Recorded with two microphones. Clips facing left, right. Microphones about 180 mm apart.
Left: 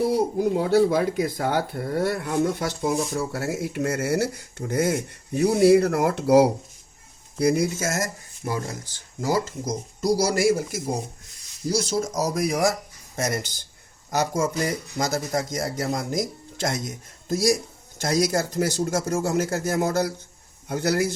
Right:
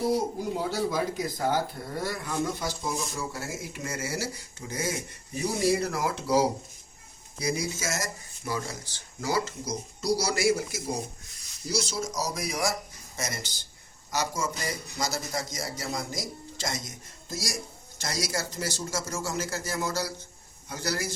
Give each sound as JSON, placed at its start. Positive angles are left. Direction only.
{"t": 0.6, "sound": "a man's voice", "side_deg": 60}